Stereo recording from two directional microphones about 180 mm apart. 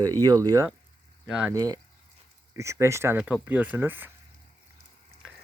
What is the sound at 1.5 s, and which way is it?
Speech, 20° right (ahead or behind).